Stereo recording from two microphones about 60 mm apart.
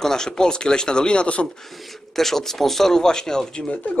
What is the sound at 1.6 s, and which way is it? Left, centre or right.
Speech, centre.